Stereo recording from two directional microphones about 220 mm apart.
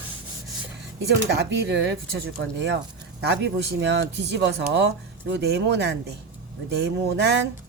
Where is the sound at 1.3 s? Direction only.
50° right (ahead or behind).